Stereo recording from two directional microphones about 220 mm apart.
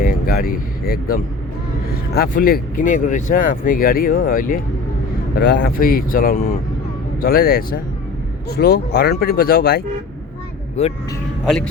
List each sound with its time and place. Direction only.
0.0 s speech: 40° left (ahead or behind)
5.4 s speech: 50° left (ahead or behind)
10.8 s speech: 30° left (ahead or behind)
11.4 s speech: centre (ahead or behind)